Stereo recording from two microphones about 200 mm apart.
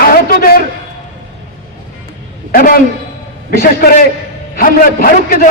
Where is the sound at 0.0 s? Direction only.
45° left (ahead or behind).